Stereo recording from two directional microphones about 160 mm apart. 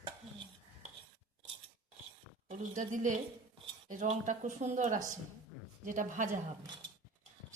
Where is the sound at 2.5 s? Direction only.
50° right (ahead or behind).